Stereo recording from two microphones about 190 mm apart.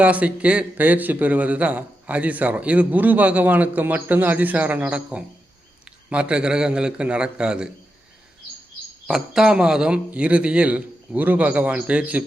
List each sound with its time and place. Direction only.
0.0 s a man's voice: 5° right (ahead or behind)
9.0 s a man's voice: 5° right (ahead or behind)